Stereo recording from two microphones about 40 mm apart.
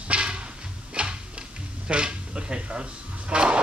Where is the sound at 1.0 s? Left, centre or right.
Right.